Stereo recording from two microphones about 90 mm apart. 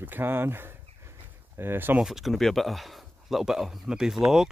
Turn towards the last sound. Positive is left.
turn(degrees=-5)  # may be behind; listen again after turning